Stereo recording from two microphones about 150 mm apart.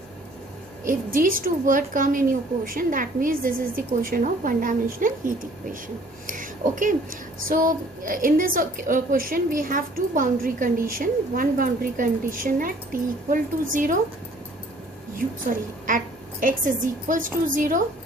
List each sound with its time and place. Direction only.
0.9 s a woman's voice: 65° right (ahead or behind)
15.5 s a woman's voice: 65° right (ahead or behind)